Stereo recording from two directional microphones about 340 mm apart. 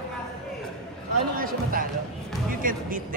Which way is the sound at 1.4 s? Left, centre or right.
Right.